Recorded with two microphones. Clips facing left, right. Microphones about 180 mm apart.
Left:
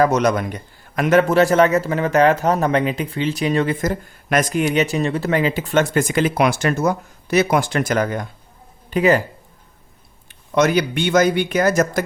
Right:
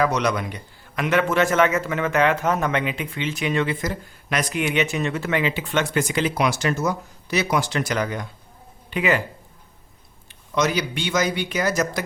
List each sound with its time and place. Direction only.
0.0 s a man's voice: 45° left (ahead or behind)
10.5 s speech: 55° left (ahead or behind)